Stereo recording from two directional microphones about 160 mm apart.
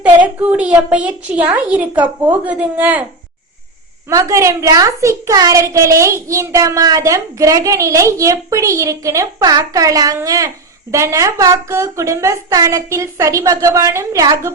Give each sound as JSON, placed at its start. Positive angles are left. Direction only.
{"t": 0.0, "sound": "a child's voice", "side_deg": -10}
{"t": 4.1, "sound": "a child's voice", "side_deg": -20}